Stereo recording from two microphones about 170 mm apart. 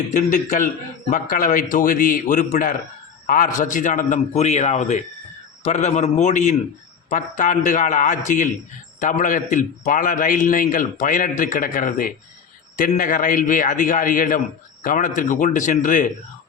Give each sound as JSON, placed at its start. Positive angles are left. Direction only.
{"t": 0.1, "sound": "a man's voice", "side_deg": 45}